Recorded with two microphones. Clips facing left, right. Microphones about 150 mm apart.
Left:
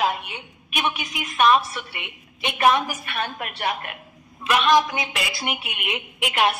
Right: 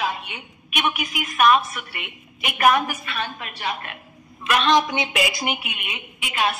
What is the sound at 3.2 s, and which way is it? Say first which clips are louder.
Speech: left 2 dB; 55° left (ahead or behind).